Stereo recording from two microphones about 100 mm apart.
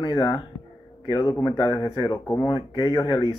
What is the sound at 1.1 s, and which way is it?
Speech, 25° left (ahead or behind).